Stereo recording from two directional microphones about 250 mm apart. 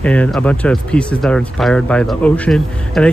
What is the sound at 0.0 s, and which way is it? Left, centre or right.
Speech, centre.